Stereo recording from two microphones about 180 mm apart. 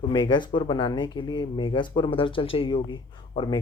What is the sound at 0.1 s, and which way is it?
Speech, 25° left (ahead or behind).